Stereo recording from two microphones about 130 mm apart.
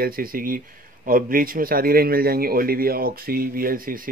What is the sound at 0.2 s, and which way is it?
Speech, 90° right.